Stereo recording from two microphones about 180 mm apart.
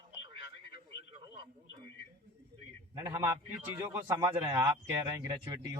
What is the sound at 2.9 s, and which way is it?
Speech, 15° right (ahead or behind).